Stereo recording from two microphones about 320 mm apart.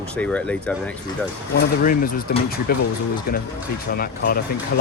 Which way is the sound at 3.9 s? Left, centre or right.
Left.